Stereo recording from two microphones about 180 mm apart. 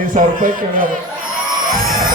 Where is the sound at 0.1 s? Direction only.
50° right (ahead or behind).